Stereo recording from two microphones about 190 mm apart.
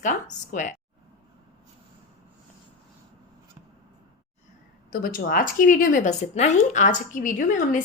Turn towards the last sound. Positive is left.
turn(degrees=45)  # may be behind; listen again after turning